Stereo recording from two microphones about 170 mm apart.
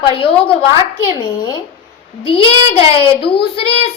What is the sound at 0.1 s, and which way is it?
Speech, 35° left (ahead or behind).